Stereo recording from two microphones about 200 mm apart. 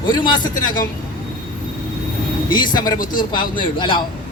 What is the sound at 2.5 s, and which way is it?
Speech, 20° left (ahead or behind).